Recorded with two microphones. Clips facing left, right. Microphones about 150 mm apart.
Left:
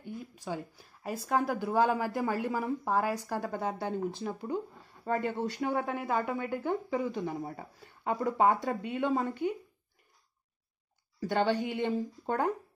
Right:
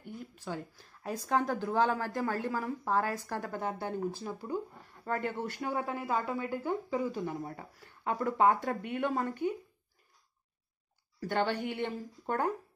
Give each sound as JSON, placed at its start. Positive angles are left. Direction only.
{"t": 0.0, "sound": "speech", "side_deg": 15}
{"t": 5.9, "sound": "speech", "side_deg": 0}
{"t": 7.2, "sound": "speech", "side_deg": 20}
{"t": 11.1, "sound": "speech", "side_deg": 15}